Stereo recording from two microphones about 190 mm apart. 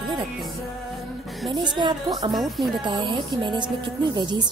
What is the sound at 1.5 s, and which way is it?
Speech, 25° right (ahead or behind).